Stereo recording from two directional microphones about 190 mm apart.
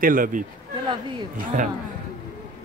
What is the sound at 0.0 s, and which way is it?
Speech, 45° right (ahead or behind).